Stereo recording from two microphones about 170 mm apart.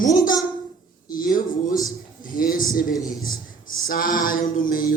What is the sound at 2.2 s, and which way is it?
Speech, 55° left (ahead or behind).